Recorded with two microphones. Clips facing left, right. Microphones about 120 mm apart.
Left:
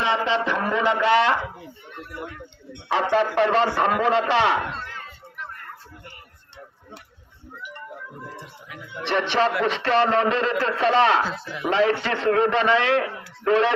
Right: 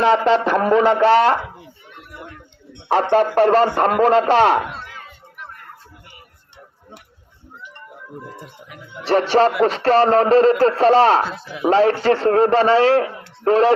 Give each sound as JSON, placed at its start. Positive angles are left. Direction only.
{"t": 0.3, "sound": "a man's voice", "side_deg": -45}
{"t": 2.9, "sound": "a man's voice", "side_deg": -45}
{"t": 4.6, "sound": "a sound", "side_deg": -10}
{"t": 9.0, "sound": "a man's voice", "side_deg": -40}
{"t": 11.3, "sound": "speech", "side_deg": -5}
{"t": 11.6, "sound": "a man's voice", "side_deg": -40}